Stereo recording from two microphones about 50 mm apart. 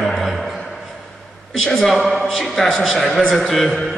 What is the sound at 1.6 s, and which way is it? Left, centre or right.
A man's voice, centre.